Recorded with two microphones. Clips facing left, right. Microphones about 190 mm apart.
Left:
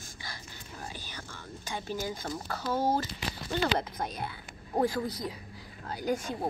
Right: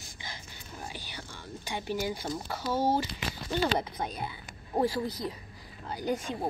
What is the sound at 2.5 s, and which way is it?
Speech, 10° right (ahead or behind).